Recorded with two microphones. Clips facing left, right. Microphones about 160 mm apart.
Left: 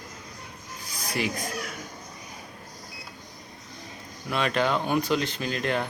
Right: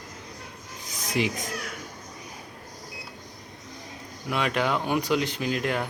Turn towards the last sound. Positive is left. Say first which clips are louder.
# right 1 dB
turn(degrees=-10)  # may be behind; listen again after turning